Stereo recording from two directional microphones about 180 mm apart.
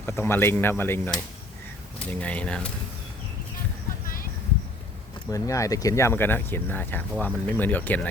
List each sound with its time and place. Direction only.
0.0 s speech: 10° left (ahead or behind)
4.0 s a sound: 50° left (ahead or behind)
5.3 s speech: 20° left (ahead or behind)